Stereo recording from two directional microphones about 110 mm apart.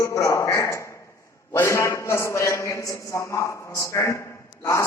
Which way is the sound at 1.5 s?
25° left (ahead or behind).